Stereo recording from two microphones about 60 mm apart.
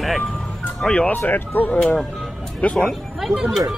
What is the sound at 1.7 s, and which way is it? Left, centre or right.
Speech, centre.